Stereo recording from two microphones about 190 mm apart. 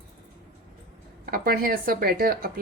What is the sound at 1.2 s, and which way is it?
A woman's voice, 50° right (ahead or behind).